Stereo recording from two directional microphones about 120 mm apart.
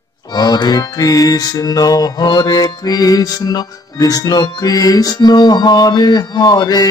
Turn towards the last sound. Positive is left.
turn(degrees=35)  # may be behind; listen again after turning